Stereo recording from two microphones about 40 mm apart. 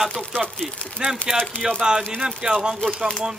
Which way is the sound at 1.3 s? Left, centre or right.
Centre.